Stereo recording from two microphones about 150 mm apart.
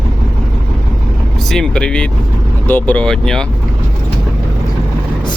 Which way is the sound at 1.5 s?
5° left (ahead or behind).